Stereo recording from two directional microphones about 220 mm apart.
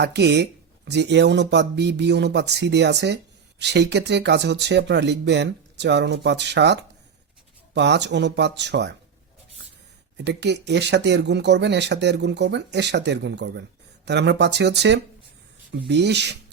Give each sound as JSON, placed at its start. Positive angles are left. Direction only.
{"t": 0.0, "sound": "speech", "side_deg": -50}
{"t": 10.2, "sound": "speech", "side_deg": -50}